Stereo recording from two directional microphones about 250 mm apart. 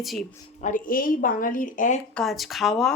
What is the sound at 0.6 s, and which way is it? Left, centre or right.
Speech, left.